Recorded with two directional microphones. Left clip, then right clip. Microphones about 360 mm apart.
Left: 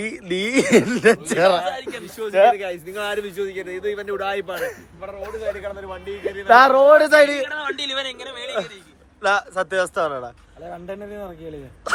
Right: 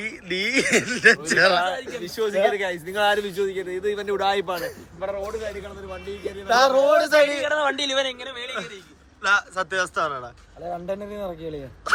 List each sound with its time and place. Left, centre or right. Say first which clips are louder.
0.0 s speech: left 2 dB; centre
2.2 s a man's voice: left 5 dB; centre
5.9 s a man's voice: left 1 dB; left
7.4 s a man's voice: right 3 dB; right
8.3 s speech: left 4 dB; centre